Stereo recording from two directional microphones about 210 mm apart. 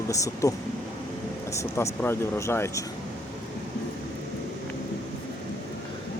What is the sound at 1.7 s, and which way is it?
Speech, 10° left (ahead or behind).